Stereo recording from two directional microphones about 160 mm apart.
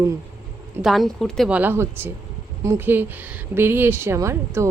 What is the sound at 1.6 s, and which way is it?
A woman's voice, 15° right (ahead or behind).